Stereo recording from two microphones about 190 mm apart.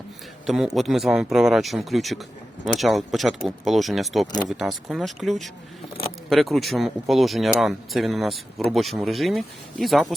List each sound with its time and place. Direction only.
0.4 s speech: centre (ahead or behind)